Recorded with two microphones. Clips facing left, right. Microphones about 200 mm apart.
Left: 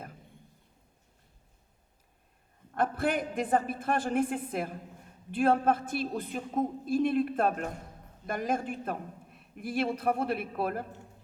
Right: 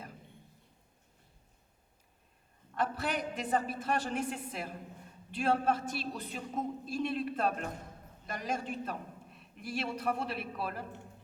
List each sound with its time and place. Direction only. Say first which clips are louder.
2.7 s a man's voice: left 5 dB; 50° left (ahead or behind)